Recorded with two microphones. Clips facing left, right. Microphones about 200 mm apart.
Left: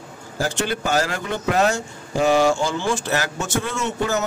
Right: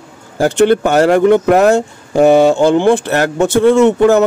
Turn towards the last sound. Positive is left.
turn(degrees=-60)  # may be behind; listen again after turning